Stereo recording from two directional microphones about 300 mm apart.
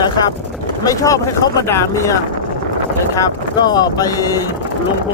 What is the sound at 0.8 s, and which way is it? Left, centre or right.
Speech, centre.